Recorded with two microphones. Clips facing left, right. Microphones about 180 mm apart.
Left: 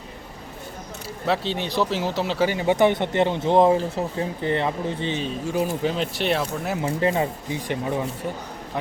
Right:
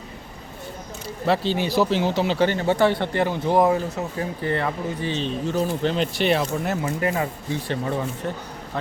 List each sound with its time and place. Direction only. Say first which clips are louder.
1.3 s speech: right 3 dB; centre (ahead or behind); by 5.1 s 25° left (ahead or behind)
5.1 s speech: right 1 dB; 10° left (ahead or behind)
6.8 s speech: left 2 dB; 25° left (ahead or behind)
7.5 s speech: right 2 dB; 15° left (ahead or behind)